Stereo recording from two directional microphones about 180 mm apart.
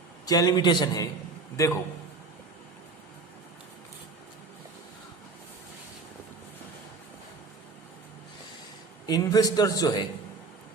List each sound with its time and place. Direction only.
0.3 s a man's voice: 20° left (ahead or behind)
9.0 s a man's voice: 20° left (ahead or behind)